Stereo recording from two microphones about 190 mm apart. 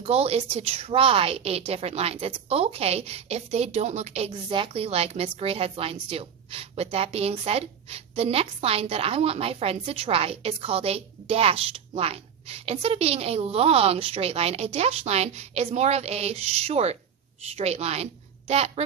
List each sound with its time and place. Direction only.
0.0 s a woman's voice: 35° right (ahead or behind)